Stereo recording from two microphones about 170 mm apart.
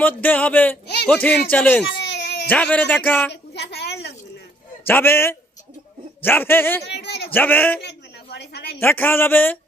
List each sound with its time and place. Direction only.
0.0 s speech: 10° left (ahead or behind)
2.0 s baby cry: 85° left
2.5 s speech: 10° left (ahead or behind)
3.5 s a sound: 80° left
4.9 s speech: 10° left (ahead or behind)
6.8 s a sound: 80° left
7.3 s speech: 10° left (ahead or behind)
7.8 s a sound: 80° left
8.8 s speech: 10° left (ahead or behind)